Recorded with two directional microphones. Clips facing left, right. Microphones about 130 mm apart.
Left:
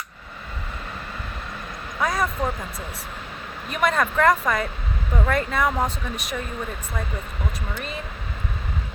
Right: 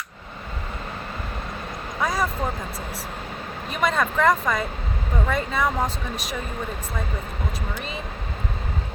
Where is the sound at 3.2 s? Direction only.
35° right (ahead or behind).